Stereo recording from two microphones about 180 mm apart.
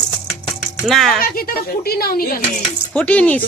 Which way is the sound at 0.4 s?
5° left (ahead or behind).